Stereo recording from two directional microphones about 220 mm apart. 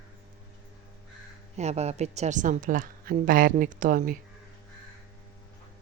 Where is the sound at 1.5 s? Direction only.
30° right (ahead or behind).